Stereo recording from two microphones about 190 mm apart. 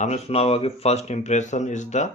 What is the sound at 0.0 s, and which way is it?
Speech, 35° left (ahead or behind).